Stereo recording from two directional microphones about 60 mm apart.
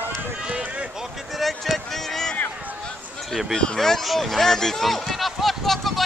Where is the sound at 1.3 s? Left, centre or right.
Centre.